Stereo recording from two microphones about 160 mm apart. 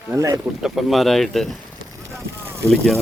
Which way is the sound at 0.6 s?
Centre (ahead or behind).